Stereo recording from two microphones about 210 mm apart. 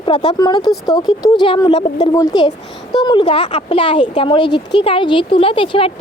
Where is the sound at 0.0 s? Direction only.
25° left (ahead or behind).